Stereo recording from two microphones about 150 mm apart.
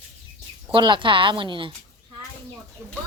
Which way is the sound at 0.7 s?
30° right (ahead or behind).